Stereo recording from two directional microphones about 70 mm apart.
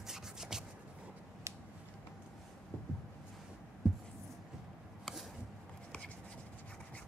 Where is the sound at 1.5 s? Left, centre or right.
Right.